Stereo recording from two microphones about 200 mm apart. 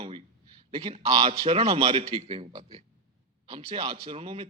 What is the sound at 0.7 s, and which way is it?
A man's voice, 30° right (ahead or behind).